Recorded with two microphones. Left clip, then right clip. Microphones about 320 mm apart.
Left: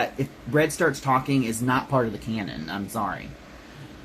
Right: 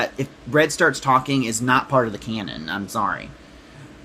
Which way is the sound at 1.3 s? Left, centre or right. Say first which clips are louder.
Right 5 dB; right.